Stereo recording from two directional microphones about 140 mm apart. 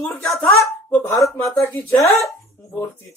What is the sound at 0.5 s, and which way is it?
Speech, 25° left (ahead or behind).